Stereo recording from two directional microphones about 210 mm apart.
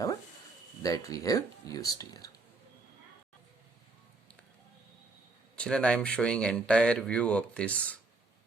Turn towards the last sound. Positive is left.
turn(degrees=5)  # may be behind; listen again after turning